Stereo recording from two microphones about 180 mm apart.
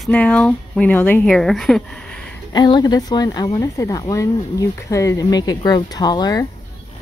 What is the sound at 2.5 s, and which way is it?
Speech, 25° left (ahead or behind).